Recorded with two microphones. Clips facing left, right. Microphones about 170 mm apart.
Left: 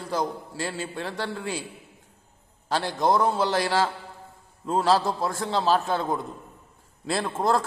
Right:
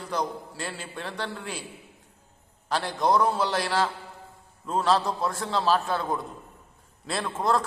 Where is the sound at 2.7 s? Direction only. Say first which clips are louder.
Left 1 dB; 30° left (ahead or behind).